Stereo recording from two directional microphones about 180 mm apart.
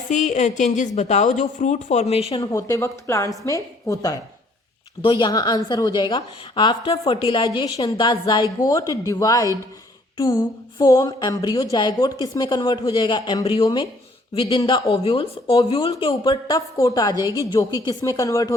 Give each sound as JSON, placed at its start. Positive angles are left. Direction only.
{"t": 0.1, "sound": "a woman's voice", "side_deg": 40}
{"t": 2.4, "sound": "a woman's voice", "side_deg": 15}